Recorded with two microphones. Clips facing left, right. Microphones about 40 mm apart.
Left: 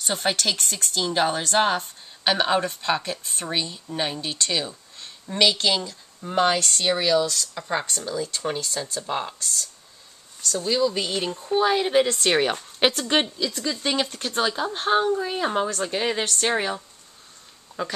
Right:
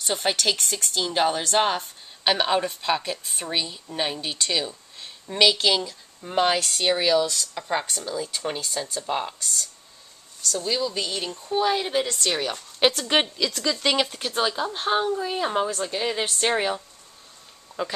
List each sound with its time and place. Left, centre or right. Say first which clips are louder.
0.0 s speech: even; centre
12.0 s speech: left 5 dB; left
12.7 s a woman's voice: right 3 dB; centre
13.4 s speech: right 2 dB; right
13.9 s speech: even; centre
15.9 s speech: left 2 dB; centre
16.3 s speech: even; centre